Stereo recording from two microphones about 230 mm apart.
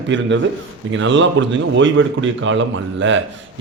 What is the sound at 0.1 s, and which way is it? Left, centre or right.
A man's voice, right.